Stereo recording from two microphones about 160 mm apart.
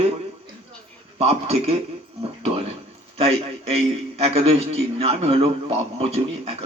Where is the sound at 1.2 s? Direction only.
40° right (ahead or behind).